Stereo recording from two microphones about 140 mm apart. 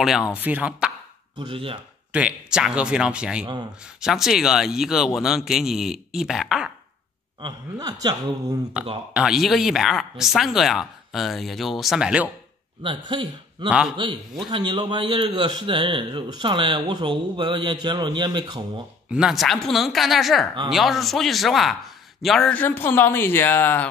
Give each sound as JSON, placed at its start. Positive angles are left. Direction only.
{"t": 0.3, "sound": "speech", "side_deg": -10}
{"t": 1.4, "sound": "a man's voice", "side_deg": -40}
{"t": 2.1, "sound": "speech", "side_deg": -5}
{"t": 7.3, "sound": "a man's voice", "side_deg": -30}
{"t": 8.8, "sound": "speech", "side_deg": -10}
{"t": 12.8, "sound": "a man's voice", "side_deg": -35}
{"t": 13.7, "sound": "speech", "side_deg": -5}
{"t": 14.5, "sound": "a man's voice", "side_deg": -35}
{"t": 19.0, "sound": "a man's voice", "side_deg": -5}